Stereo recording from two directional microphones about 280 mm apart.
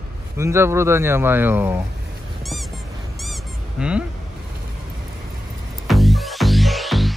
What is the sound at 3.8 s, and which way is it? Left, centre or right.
Speech, centre.